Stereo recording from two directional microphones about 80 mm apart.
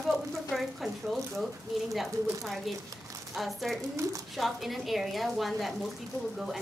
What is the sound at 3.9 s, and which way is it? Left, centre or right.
Speech, right.